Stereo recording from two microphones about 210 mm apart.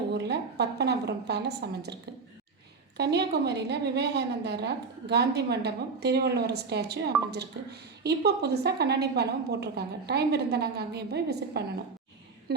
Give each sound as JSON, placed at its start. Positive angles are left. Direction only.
{"t": 0.1, "sound": "a woman's voice", "side_deg": -50}
{"t": 3.0, "sound": "a woman's voice", "side_deg": -50}